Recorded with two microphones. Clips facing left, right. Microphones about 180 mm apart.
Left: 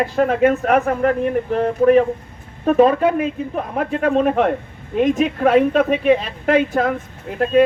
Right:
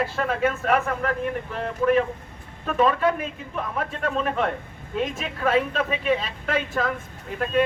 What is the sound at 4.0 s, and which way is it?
A woman's voice, 50° left (ahead or behind).